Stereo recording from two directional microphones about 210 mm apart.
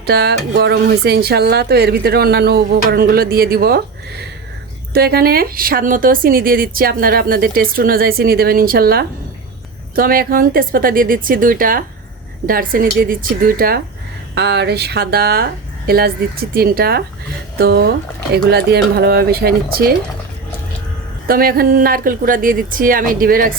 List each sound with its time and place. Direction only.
0.0 s a woman's voice: 50° right (ahead or behind)
4.9 s a woman's voice: 45° right (ahead or behind)
21.2 s speech: 45° right (ahead or behind)